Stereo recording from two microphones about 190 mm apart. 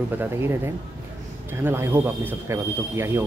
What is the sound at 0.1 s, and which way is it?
Speech, 10° right (ahead or behind).